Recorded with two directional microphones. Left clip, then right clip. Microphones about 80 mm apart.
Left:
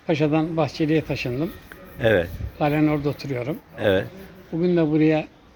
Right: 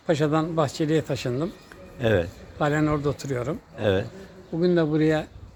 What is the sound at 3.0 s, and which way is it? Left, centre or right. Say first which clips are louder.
A man's voice: left 1 dB; right.